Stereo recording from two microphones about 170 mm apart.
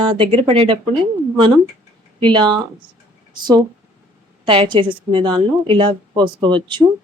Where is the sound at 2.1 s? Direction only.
30° right (ahead or behind).